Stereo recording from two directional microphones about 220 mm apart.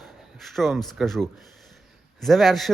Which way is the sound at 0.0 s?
Centre (ahead or behind).